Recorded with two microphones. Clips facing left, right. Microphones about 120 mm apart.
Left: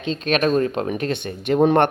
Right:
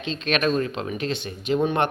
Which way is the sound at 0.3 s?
45° left (ahead or behind).